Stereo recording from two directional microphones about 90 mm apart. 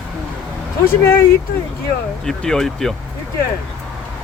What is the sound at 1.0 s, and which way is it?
Speech, 30° left (ahead or behind).